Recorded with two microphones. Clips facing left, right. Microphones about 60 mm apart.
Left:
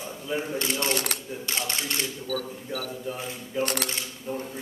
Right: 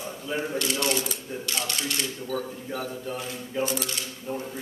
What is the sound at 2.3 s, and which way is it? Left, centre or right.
Speech, right.